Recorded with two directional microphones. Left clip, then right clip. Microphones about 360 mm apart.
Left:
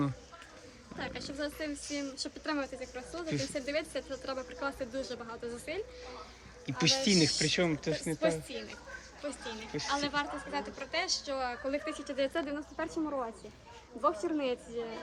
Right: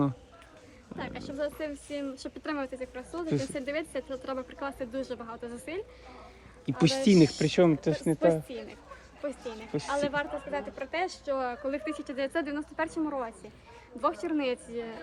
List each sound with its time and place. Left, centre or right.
0.9 s a woman's voice: right